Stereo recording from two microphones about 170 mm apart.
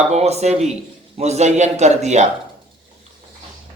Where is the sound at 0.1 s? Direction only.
40° right (ahead or behind).